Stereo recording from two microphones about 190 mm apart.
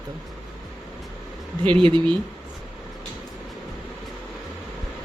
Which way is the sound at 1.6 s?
25° right (ahead or behind).